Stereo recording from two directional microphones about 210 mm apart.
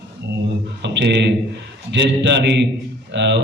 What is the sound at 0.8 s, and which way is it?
Speech, 55° right (ahead or behind).